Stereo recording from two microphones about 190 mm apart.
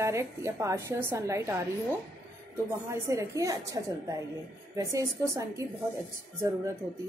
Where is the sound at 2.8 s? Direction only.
15° right (ahead or behind).